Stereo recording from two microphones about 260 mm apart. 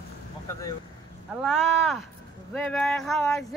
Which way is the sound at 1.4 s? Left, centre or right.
Centre.